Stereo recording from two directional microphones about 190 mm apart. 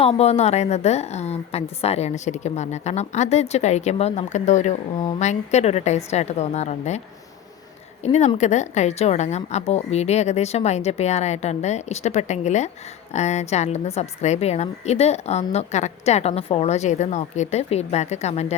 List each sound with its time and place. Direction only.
0.0 s a woman's voice: 30° left (ahead or behind)
8.0 s a woman's voice: 35° left (ahead or behind)